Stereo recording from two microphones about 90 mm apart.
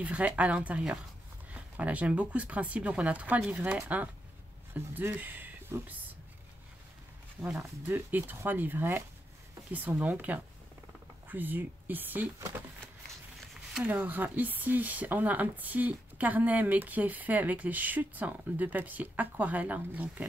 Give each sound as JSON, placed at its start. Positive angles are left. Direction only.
{"t": 0.0, "sound": "speech", "side_deg": -15}
{"t": 7.4, "sound": "speech", "side_deg": -10}
{"t": 13.8, "sound": "speech", "side_deg": -20}